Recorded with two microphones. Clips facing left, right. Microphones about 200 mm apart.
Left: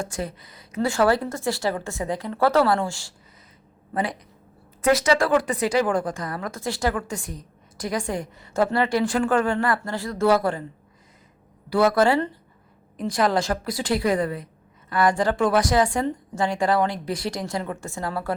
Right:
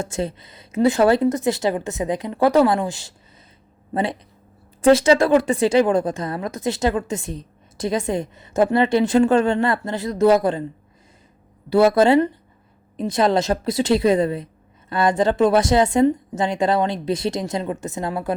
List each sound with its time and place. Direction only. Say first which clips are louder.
0.0 s speech: right 5 dB; 25° right (ahead or behind)
11.7 s speech: right 5 dB; 25° right (ahead or behind)